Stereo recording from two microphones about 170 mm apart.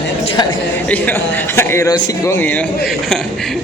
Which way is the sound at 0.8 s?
10° left (ahead or behind).